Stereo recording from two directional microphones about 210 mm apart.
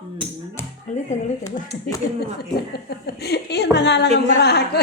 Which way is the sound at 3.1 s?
50° left (ahead or behind).